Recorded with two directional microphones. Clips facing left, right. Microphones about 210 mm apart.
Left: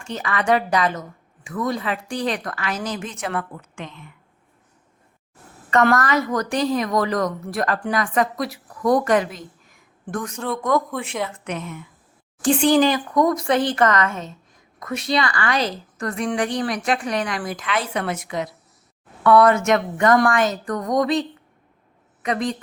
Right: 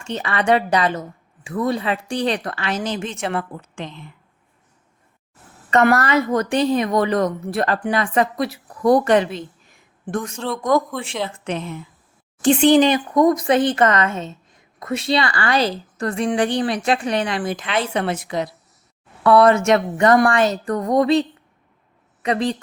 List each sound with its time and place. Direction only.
0.0 s a woman's voice: 25° right (ahead or behind)
5.7 s a woman's voice: 25° right (ahead or behind)